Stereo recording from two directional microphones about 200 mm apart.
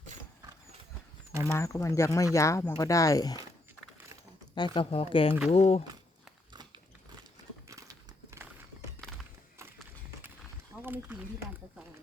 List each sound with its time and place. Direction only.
0.1 s horse: 35° right (ahead or behind)
1.5 s speech: 15° left (ahead or behind)
4.5 s speech: 25° left (ahead or behind)
7.7 s horse: 15° right (ahead or behind)
9.0 s music: centre (ahead or behind)
10.8 s a sound: 10° right (ahead or behind)